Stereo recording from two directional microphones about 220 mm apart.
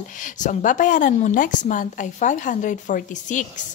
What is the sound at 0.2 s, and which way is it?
A woman's voice, 35° left (ahead or behind).